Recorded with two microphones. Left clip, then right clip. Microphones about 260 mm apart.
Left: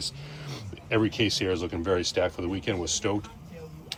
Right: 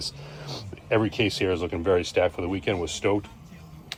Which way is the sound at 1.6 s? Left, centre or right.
Right.